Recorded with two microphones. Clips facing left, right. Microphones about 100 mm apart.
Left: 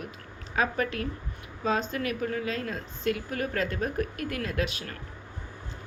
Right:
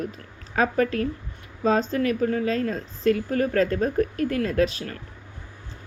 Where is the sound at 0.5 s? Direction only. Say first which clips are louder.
Right 6 dB; 40° right (ahead or behind).